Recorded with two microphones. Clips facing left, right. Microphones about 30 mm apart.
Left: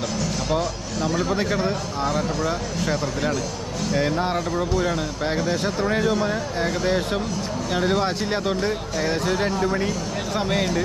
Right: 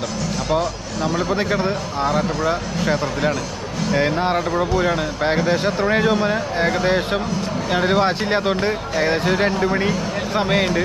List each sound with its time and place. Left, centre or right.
0.5 s speech: centre